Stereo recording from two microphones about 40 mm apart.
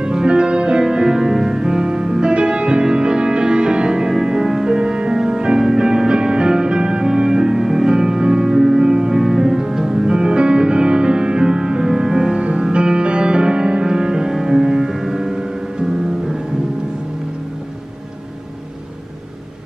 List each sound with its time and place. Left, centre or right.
0.0 s music: centre
12.4 s music: right
12.6 s music: centre